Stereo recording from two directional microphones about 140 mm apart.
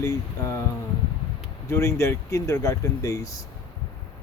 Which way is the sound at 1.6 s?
20° left (ahead or behind).